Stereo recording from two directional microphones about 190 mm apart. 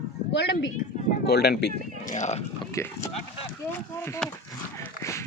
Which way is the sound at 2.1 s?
40° left (ahead or behind).